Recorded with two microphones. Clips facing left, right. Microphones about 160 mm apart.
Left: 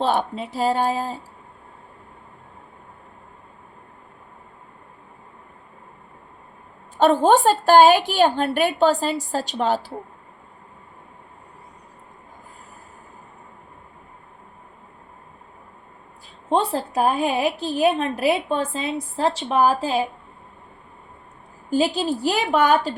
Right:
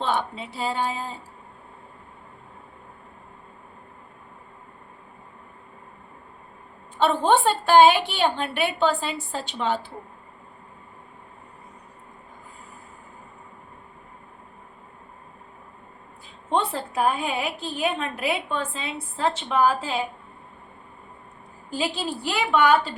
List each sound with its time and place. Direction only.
0.0 s a woman's voice: 40° left (ahead or behind)
6.9 s a woman's voice: 45° left (ahead or behind)
16.5 s a woman's voice: 35° left (ahead or behind)
21.7 s a woman's voice: 40° left (ahead or behind)